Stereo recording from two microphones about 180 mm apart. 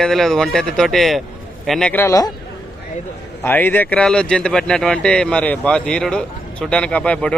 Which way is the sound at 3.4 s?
10° left (ahead or behind).